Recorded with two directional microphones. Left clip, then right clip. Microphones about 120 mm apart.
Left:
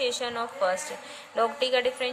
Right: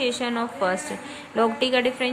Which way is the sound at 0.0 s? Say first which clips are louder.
Right 3 dB; 45° left (ahead or behind).